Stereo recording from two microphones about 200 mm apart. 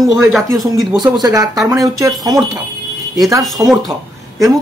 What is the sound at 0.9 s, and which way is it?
Speech, 20° right (ahead or behind).